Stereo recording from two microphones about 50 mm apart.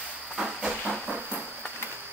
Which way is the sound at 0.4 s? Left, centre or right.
Centre.